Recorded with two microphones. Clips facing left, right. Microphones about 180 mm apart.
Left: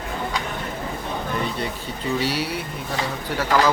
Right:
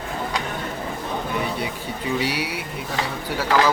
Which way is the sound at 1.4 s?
10° right (ahead or behind).